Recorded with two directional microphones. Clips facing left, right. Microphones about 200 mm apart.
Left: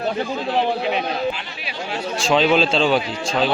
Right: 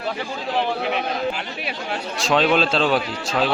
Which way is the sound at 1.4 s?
55° right (ahead or behind).